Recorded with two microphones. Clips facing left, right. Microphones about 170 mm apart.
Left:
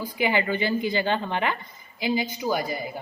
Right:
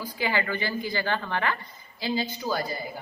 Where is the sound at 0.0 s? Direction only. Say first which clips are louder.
Left 4 dB; 20° left (ahead or behind).